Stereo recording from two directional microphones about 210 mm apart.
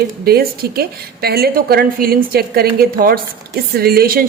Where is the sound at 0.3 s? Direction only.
45° right (ahead or behind).